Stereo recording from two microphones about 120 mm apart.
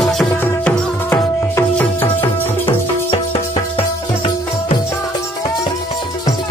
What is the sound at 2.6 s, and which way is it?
Music, 50° left (ahead or behind).